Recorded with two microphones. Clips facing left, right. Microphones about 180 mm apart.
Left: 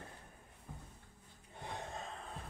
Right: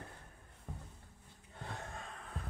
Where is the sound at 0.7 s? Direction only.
70° right (ahead or behind).